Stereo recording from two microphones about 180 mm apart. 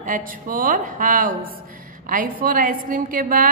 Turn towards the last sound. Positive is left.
turn(degrees=-50)  # may be behind; listen again after turning